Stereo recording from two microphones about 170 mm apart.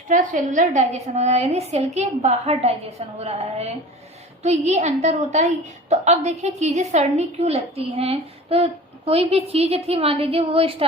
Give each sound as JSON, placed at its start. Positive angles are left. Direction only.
{"t": 0.1, "sound": "a woman's voice", "side_deg": -45}